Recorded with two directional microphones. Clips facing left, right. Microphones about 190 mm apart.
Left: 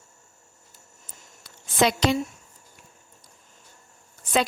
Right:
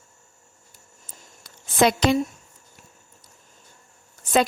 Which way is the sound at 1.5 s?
50° right (ahead or behind).